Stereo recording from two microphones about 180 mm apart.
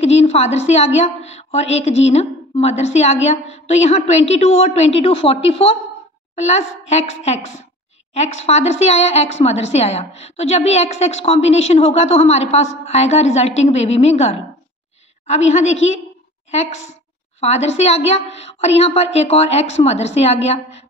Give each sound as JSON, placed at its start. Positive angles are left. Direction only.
{"t": 0.0, "sound": "a woman's voice", "side_deg": 35}
{"t": 17.4, "sound": "a woman's voice", "side_deg": 35}